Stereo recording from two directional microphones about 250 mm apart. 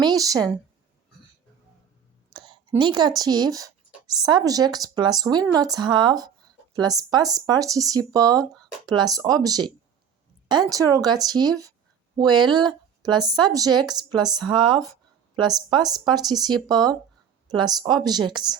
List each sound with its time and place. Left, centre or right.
0.0 s speech: centre
2.3 s a sound: centre
3.2 s speech: centre